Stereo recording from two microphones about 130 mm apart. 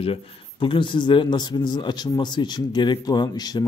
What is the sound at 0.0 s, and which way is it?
Speech, 45° left (ahead or behind).